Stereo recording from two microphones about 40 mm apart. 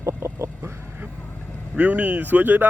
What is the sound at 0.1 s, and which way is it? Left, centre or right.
Chicken, right.